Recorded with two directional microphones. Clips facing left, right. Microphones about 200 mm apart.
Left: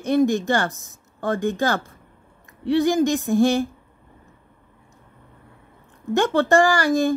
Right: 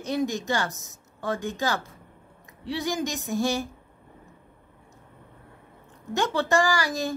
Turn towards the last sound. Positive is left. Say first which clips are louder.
# left 7 dB
turn(degrees=55)  # may be behind; listen again after turning